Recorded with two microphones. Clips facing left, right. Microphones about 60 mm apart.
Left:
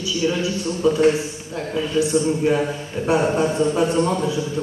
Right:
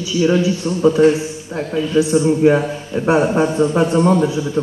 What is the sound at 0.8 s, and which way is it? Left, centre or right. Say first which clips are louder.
Speech: right 4 dB; right.